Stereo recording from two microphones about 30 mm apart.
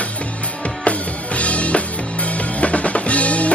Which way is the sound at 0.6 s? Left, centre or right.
Left.